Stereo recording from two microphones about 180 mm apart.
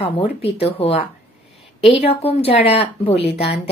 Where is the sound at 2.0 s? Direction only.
35° left (ahead or behind).